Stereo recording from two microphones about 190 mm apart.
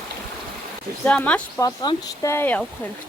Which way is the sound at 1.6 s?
20° left (ahead or behind).